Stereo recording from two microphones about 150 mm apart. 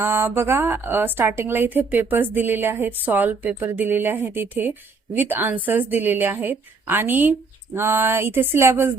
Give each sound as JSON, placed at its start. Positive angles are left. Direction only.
{"t": 0.0, "sound": "a woman's voice", "side_deg": -15}